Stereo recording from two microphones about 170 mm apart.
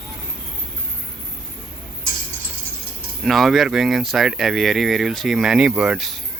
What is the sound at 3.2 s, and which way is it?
Speech, centre (ahead or behind).